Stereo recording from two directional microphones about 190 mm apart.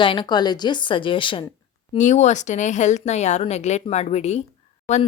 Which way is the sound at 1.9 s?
40° left (ahead or behind).